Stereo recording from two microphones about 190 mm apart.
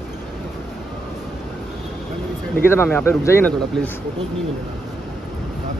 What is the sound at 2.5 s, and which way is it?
Speech, 10° left (ahead or behind).